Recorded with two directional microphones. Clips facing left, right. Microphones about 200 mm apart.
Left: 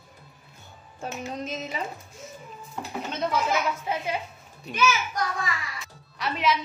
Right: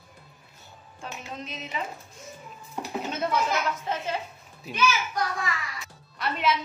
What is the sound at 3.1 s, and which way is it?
Speech, 5° right (ahead or behind).